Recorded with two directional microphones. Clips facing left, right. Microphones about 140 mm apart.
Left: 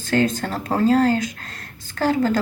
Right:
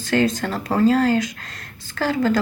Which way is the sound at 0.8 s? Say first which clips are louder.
Left 1 dB; 45° left (ahead or behind).